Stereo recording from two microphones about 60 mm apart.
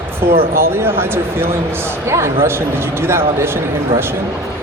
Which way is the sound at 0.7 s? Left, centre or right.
Right.